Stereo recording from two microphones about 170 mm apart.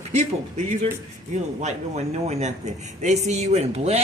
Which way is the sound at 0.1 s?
40° right (ahead or behind).